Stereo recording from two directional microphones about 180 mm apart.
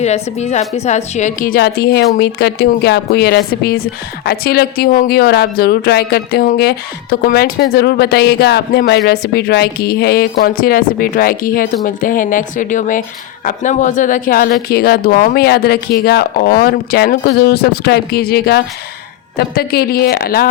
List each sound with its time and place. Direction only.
0.0 s speech: 40° left (ahead or behind); by 20.5 s 55° left (ahead or behind)